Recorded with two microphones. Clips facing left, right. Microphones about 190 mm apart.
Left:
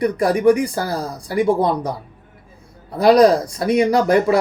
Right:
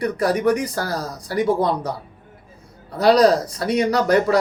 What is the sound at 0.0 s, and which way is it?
Speech, 15° left (ahead or behind).